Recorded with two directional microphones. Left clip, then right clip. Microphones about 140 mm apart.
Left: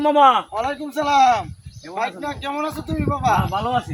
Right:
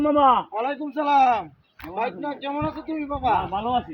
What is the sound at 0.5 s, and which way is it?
A man's voice, 30° left (ahead or behind).